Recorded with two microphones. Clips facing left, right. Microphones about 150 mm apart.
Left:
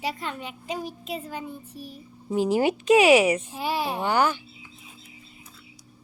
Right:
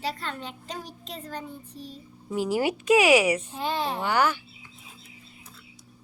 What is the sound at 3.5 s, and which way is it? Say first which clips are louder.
A woman's voice: left 1 dB; 10° left (ahead or behind).